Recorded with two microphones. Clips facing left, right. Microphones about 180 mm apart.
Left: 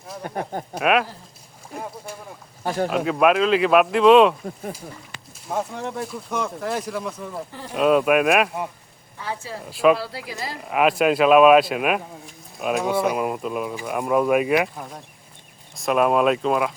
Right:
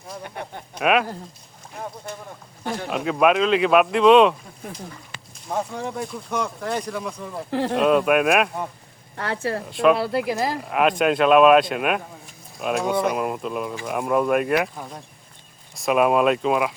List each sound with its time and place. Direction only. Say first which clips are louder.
0.2 s speech: left 9 dB; 40° left (ahead or behind)
0.8 s speech: even; centre (ahead or behind)
2.1 s speech: right 1 dB; 10° left (ahead or behind)
2.6 s speech: left 5 dB; 50° left (ahead or behind)
2.9 s speech: right 1 dB; centre (ahead or behind)
7.5 s speech: right 12 dB; 75° right (ahead or behind)
7.8 s speech: left 2 dB; centre (ahead or behind)
9.1 s speech: right 6 dB; 70° right (ahead or behind)
9.6 s speech: left 1 dB; centre (ahead or behind)
10.0 s speech: right 9 dB; 60° right (ahead or behind)
10.6 s speech: left 4 dB; centre (ahead or behind)